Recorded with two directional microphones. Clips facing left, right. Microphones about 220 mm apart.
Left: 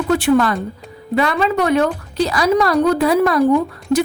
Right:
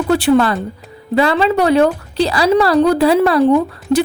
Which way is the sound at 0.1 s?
30° right (ahead or behind).